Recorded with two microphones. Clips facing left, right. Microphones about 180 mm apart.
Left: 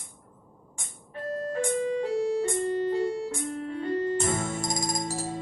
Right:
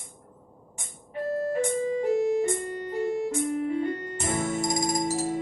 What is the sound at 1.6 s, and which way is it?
Organ, 20° right (ahead or behind).